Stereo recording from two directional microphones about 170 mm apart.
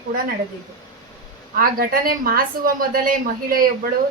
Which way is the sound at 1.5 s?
60° right (ahead or behind).